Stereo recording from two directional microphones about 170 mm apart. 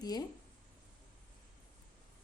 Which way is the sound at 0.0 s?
25° left (ahead or behind).